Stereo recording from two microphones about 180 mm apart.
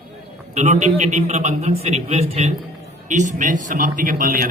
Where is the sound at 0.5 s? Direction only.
40° right (ahead or behind).